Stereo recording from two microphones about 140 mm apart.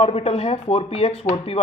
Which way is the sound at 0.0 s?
50° left (ahead or behind).